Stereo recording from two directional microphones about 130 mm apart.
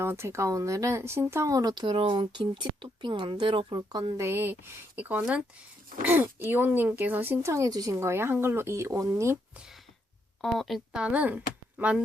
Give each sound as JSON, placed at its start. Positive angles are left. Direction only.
{"t": 0.0, "sound": "speech", "side_deg": -20}
{"t": 4.3, "sound": "speech", "side_deg": -20}
{"t": 9.6, "sound": "speech", "side_deg": -5}